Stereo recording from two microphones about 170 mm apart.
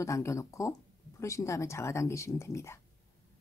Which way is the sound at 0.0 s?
15° left (ahead or behind).